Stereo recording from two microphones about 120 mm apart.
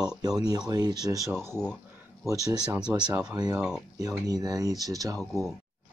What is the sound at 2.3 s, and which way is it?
Speech, 30° right (ahead or behind).